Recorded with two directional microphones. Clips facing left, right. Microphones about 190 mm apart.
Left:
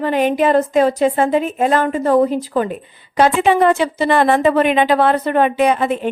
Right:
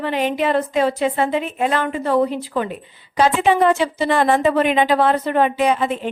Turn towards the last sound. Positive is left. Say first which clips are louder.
# left 3 dB
turn(degrees=55)  # may be behind; listen again after turning